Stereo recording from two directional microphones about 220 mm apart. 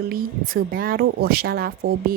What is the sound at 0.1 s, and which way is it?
Speech, 40° right (ahead or behind).